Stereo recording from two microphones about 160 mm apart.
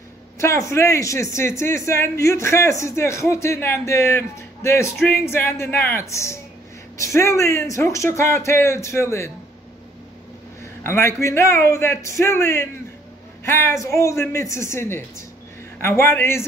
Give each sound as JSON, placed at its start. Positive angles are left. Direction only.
{"t": 0.4, "sound": "speech", "side_deg": 20}
{"t": 10.8, "sound": "speech", "side_deg": 15}